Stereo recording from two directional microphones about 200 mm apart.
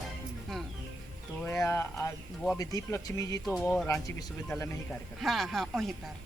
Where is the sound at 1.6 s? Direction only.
15° left (ahead or behind).